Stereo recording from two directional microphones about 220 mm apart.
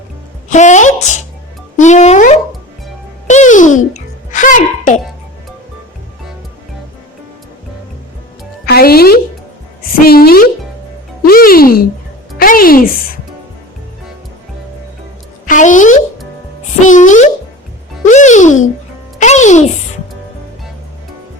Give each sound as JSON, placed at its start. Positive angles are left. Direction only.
{"t": 0.5, "sound": "a woman's voice", "side_deg": 35}
{"t": 8.6, "sound": "a woman's voice", "side_deg": 45}
{"t": 15.4, "sound": "a woman's voice", "side_deg": 35}